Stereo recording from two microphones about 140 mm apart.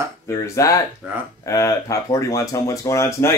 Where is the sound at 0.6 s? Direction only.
25° left (ahead or behind).